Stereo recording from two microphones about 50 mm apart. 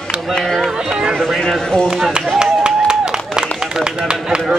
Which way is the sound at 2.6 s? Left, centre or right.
Centre.